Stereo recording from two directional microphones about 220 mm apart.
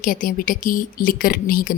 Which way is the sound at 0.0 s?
40° left (ahead or behind).